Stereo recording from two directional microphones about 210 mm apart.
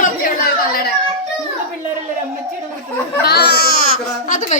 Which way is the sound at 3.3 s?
50° left (ahead or behind).